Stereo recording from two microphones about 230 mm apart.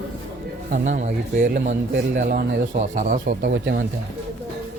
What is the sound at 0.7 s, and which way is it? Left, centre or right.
Speech, right.